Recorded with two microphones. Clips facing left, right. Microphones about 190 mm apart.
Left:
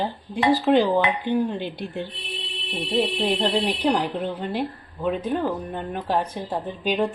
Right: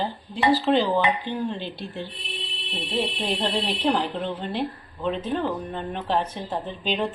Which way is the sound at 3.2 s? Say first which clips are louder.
Left 4 dB; 10° left (ahead or behind).